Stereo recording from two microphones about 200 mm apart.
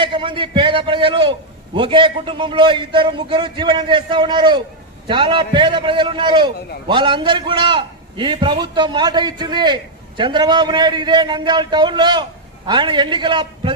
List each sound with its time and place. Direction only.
0.0 s a man's voice: 25° right (ahead or behind)